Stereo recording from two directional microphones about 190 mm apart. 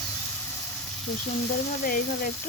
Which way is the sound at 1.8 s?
50° left (ahead or behind).